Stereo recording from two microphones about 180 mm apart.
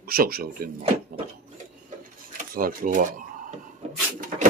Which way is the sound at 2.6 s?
50° right (ahead or behind).